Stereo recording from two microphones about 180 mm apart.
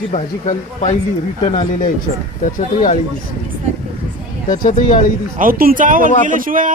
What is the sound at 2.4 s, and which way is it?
Speech, 50° left (ahead or behind).